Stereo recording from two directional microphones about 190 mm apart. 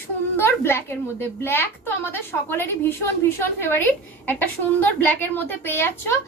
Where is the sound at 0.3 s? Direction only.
10° left (ahead or behind).